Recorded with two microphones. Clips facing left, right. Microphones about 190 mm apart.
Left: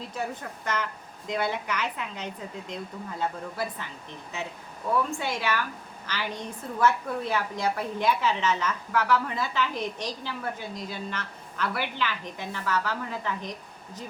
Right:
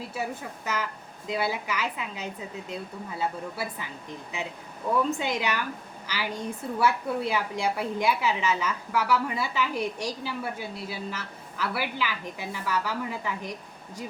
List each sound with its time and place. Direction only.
0.1 s a woman's voice: 5° right (ahead or behind)